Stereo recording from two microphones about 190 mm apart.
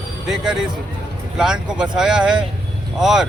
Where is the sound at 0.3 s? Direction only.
Centre (ahead or behind).